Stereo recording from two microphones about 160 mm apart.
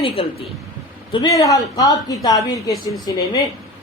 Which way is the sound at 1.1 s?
25° left (ahead or behind).